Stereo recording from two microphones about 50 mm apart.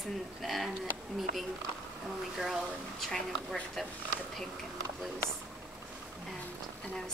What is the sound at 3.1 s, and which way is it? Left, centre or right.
Speech, centre.